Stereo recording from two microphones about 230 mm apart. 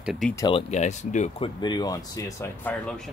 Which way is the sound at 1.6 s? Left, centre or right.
Centre.